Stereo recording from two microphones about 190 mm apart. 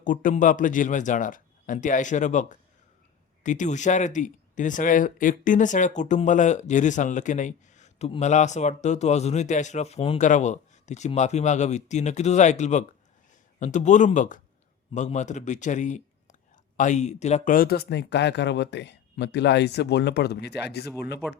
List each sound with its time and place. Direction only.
0.0 s a man's voice: 45° left (ahead or behind); by 20.8 s 60° left (ahead or behind)